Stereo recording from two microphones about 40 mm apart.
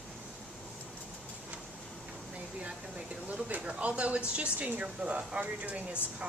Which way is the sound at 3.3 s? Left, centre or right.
Right.